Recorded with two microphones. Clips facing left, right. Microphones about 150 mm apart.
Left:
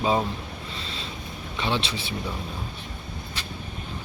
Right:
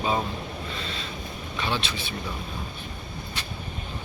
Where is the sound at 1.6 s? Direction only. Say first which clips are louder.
Left 3 dB; 30° left (ahead or behind).